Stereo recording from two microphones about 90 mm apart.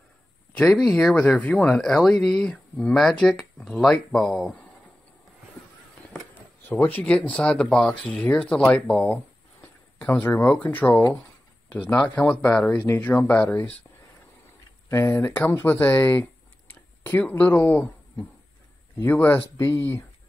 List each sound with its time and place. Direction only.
0.7 s speech: 5° left (ahead or behind)
1.8 s speech: 5° left (ahead or behind)
6.7 s speech: 20° left (ahead or behind)
14.9 s speech: 25° left (ahead or behind)